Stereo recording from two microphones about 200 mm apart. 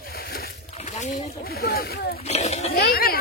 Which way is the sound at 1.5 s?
50° left (ahead or behind).